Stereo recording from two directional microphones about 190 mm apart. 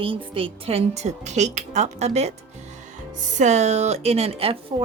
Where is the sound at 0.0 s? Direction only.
25° right (ahead or behind).